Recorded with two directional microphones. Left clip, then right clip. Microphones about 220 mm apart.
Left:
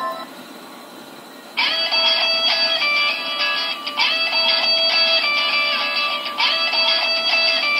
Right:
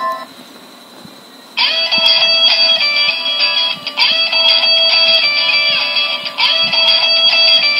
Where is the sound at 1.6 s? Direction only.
20° right (ahead or behind).